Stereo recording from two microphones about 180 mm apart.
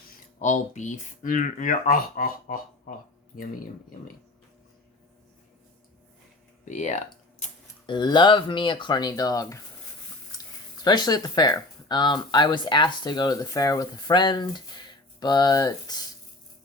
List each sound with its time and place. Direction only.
0.4 s speech: 40° left (ahead or behind)
6.7 s speech: 40° left (ahead or behind)
7.9 s speech: 25° left (ahead or behind)
10.8 s speech: 20° left (ahead or behind)